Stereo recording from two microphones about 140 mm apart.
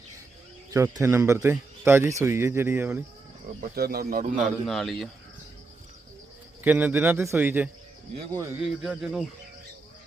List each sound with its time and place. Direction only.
0.7 s speech: 20° right (ahead or behind)
3.6 s speech: 90° right
4.4 s a man's voice: centre (ahead or behind)
6.7 s speech: 10° right (ahead or behind)
8.8 s a man's voice: 5° right (ahead or behind)